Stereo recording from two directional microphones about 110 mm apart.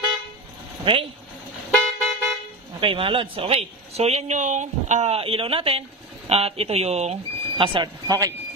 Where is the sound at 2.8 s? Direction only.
55° right (ahead or behind); by 7.6 s 75° right (ahead or behind).